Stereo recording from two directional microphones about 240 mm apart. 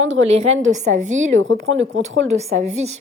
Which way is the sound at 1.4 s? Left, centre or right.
Right.